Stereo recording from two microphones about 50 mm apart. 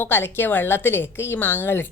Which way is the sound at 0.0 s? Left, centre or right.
Left.